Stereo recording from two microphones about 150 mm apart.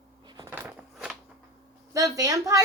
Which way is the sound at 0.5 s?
10° right (ahead or behind).